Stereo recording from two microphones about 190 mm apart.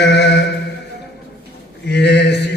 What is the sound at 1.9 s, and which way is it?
Speech, 65° left (ahead or behind).